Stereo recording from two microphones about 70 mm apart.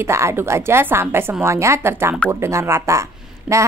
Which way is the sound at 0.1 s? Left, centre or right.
Right.